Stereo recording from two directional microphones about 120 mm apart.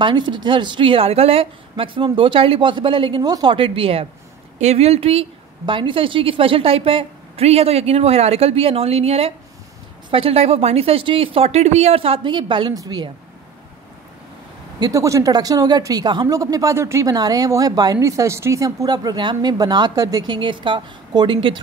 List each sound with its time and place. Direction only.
0.0 s speech: 40° right (ahead or behind)
3.5 s speech: 50° right (ahead or behind)
4.6 s a woman's voice: 60° right (ahead or behind)
5.7 s a woman's voice: 45° right (ahead or behind)
12.7 s speech: 35° right (ahead or behind)
14.8 s speech: 25° right (ahead or behind)
20.3 s speech: 45° right (ahead or behind)